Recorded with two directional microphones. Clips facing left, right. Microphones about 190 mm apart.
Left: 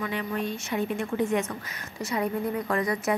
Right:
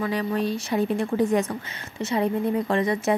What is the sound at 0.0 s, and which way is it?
A woman's voice, 35° right (ahead or behind).